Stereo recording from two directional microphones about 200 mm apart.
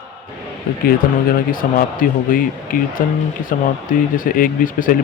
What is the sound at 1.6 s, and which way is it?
Speech, 45° left (ahead or behind).